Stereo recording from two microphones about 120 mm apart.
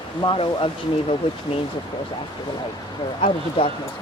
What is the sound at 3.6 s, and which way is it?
Speech, 50° left (ahead or behind).